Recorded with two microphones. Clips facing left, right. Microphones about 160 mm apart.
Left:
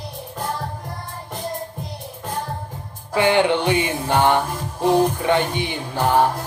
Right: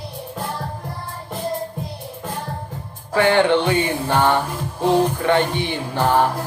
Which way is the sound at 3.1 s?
15° left (ahead or behind).